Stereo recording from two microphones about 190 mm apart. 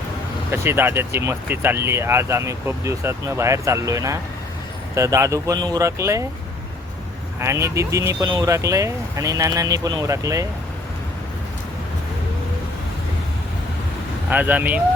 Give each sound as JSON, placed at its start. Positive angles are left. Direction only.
{"t": 0.5, "sound": "speech", "side_deg": -10}
{"t": 7.3, "sound": "speech", "side_deg": -15}
{"t": 14.3, "sound": "speech", "side_deg": -10}